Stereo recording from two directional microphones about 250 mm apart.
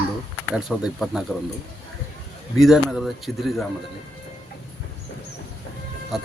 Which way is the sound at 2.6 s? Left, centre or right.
Centre.